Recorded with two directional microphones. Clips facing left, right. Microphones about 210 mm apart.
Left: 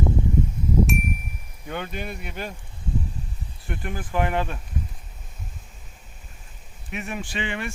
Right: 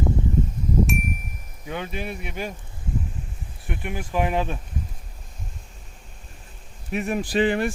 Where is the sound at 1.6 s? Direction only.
5° right (ahead or behind).